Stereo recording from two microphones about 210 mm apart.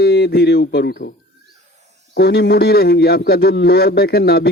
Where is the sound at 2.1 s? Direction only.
50° left (ahead or behind).